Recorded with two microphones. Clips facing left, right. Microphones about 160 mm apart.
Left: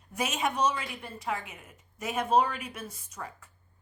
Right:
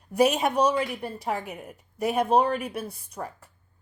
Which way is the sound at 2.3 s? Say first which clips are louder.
Right 1 dB; 55° right (ahead or behind).